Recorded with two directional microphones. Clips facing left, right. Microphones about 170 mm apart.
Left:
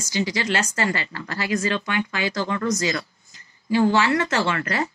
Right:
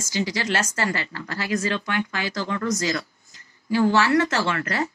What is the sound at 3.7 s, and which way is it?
Speech, 15° left (ahead or behind).